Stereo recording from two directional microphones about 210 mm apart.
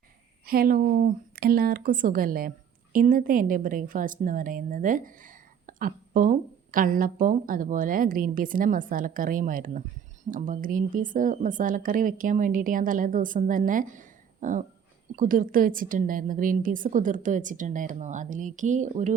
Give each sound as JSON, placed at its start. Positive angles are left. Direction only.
{"t": 0.4, "sound": "a woman's voice", "side_deg": -45}